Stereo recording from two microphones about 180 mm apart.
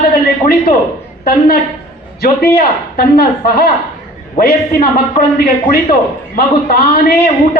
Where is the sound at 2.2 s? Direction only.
60° left (ahead or behind).